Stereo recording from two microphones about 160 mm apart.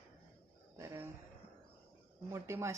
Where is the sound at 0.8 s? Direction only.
15° right (ahead or behind).